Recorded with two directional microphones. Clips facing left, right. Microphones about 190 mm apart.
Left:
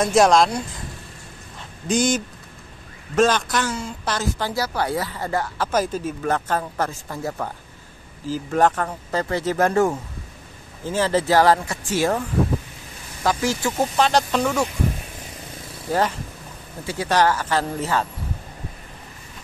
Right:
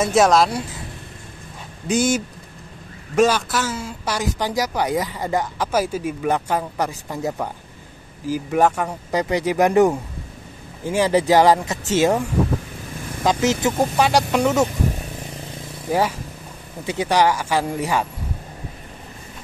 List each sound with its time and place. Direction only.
0.0 s speech: centre (ahead or behind)
1.9 s speech: 5° right (ahead or behind)
15.9 s speech: 10° right (ahead or behind)